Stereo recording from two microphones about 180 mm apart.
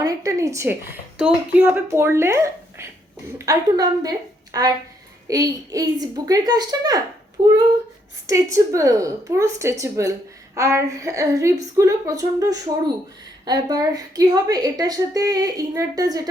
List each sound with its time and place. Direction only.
0.0 s a woman's voice: 20° right (ahead or behind)
8.3 s a woman's voice: 15° right (ahead or behind)